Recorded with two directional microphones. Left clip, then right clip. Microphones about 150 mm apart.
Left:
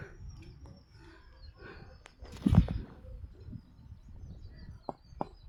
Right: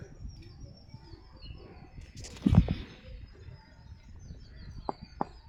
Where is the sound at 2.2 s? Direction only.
Centre (ahead or behind).